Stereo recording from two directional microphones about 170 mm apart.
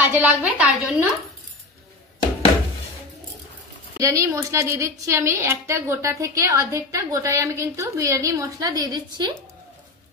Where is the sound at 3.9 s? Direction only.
20° right (ahead or behind).